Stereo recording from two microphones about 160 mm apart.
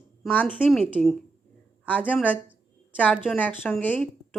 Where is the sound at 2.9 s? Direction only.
10° left (ahead or behind).